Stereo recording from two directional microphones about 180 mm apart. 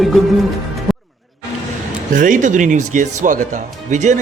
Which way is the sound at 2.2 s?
45° right (ahead or behind).